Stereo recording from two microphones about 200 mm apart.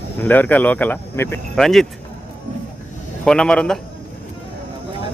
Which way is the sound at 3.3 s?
5° left (ahead or behind).